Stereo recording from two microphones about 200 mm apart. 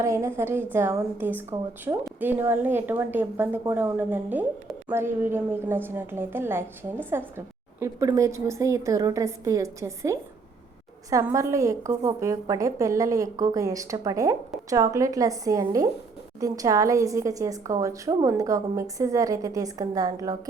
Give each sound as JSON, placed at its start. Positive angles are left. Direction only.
{"t": 0.0, "sound": "a woman's voice", "side_deg": -15}